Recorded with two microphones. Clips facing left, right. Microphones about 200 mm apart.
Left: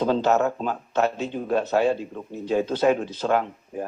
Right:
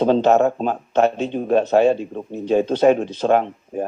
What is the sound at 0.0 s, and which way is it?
Speech, 25° right (ahead or behind).